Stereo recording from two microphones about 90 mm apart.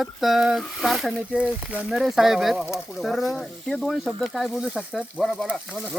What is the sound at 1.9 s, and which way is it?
Speech, centre (ahead or behind).